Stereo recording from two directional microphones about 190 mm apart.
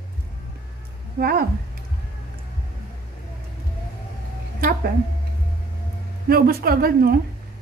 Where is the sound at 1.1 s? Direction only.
50° right (ahead or behind).